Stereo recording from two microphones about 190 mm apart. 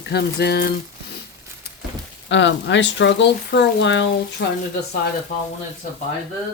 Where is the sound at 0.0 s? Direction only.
60° left (ahead or behind).